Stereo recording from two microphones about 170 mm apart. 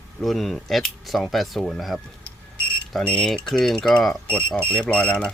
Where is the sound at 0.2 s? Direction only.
Centre (ahead or behind).